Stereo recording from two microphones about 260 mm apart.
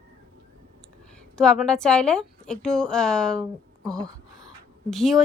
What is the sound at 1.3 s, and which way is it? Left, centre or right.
A woman's voice, centre.